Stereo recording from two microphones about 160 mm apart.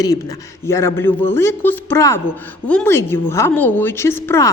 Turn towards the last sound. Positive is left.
turn(degrees=15)  # may be behind; listen again after turning